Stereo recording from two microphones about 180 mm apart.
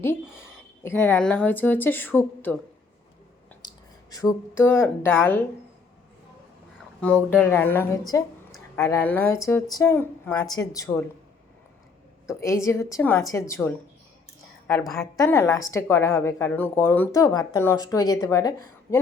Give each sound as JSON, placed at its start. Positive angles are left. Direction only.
{"t": 0.8, "sound": "a woman's voice", "side_deg": 10}
{"t": 3.6, "sound": "speech", "side_deg": 20}
{"t": 7.0, "sound": "a woman's voice", "side_deg": 5}
{"t": 12.3, "sound": "a woman's voice", "side_deg": 15}
{"t": 14.7, "sound": "a woman's voice", "side_deg": 5}
{"t": 15.1, "sound": "a woman's voice", "side_deg": 15}